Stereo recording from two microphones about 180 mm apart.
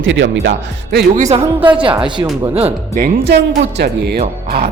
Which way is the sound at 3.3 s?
70° right (ahead or behind).